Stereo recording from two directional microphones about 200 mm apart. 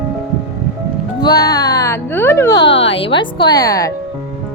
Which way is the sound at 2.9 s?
25° left (ahead or behind).